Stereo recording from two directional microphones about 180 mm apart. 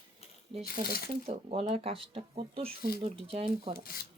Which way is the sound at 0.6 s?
60° left (ahead or behind).